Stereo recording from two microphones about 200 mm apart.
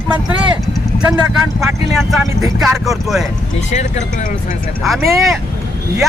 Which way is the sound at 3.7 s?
35° left (ahead or behind).